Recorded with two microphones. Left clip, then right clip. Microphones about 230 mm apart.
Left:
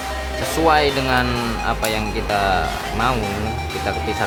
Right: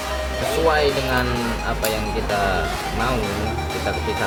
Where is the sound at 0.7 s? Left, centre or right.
Left.